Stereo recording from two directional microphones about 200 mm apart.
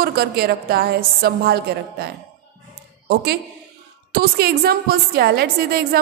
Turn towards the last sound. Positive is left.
turn(degrees=-50)  # may be behind; listen again after turning